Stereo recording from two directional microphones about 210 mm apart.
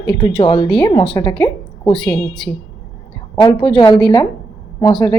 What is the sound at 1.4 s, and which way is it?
Speech, 5° left (ahead or behind).